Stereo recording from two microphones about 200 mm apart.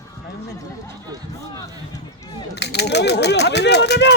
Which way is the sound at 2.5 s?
55° left (ahead or behind).